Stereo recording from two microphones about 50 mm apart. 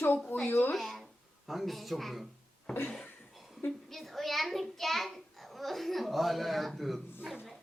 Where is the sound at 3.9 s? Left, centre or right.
Centre.